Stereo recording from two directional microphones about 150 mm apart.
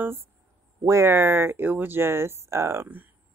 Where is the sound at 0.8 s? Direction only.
15° right (ahead or behind).